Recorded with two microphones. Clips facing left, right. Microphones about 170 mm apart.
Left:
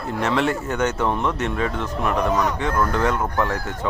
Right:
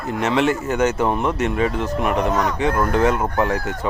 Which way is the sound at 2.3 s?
10° left (ahead or behind).